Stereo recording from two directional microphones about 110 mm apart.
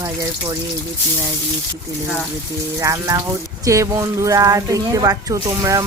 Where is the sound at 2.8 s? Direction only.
30° right (ahead or behind).